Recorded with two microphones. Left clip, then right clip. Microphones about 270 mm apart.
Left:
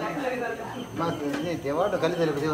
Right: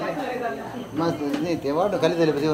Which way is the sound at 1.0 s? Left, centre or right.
Right.